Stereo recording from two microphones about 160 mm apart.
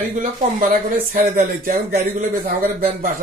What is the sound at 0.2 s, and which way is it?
Speech, 55° right (ahead or behind).